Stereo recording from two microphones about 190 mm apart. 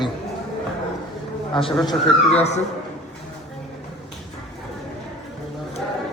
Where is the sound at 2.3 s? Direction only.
35° left (ahead or behind).